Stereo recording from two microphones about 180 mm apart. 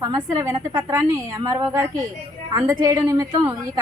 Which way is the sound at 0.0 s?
20° right (ahead or behind).